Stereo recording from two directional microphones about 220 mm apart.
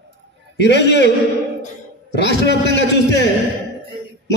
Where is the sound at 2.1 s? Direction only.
50° left (ahead or behind).